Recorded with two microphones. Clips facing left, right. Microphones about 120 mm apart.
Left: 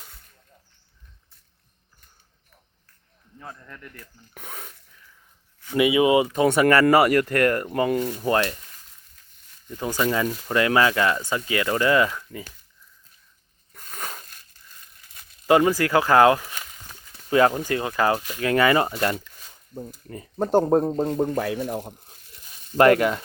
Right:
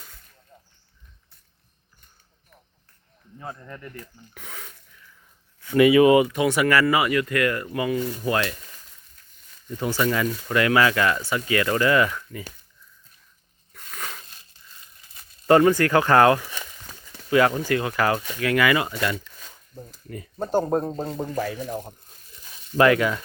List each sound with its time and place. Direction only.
3.5 s speech: 10° right (ahead or behind)
4.4 s speech: 50° left (ahead or behind)
5.7 s speech: 15° left (ahead or behind)
6.6 s speech: 30° left (ahead or behind)
7.1 s speech: 45° left (ahead or behind)
8.2 s speech: 30° left (ahead or behind)
9.8 s speech: 20° left (ahead or behind)
13.7 s crushing: 40° left (ahead or behind)
15.1 s crumpling: centre (ahead or behind)
15.4 s speech: 10° left (ahead or behind)
17.2 s speech: 30° left (ahead or behind)
20.5 s speech: 55° left (ahead or behind); by 21.8 s 70° left (ahead or behind)
22.8 s speech: 45° left (ahead or behind)